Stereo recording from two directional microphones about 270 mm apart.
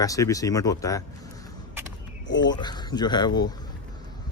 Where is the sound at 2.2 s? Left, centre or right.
Left.